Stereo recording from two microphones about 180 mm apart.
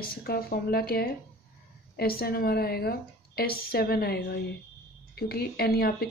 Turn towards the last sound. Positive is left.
turn(degrees=60)  # may be behind; listen again after turning